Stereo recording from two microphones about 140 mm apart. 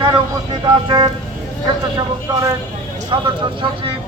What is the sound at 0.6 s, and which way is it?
Speech, 35° right (ahead or behind).